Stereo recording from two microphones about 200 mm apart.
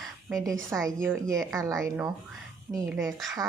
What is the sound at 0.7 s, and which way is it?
A woman's voice, 10° right (ahead or behind).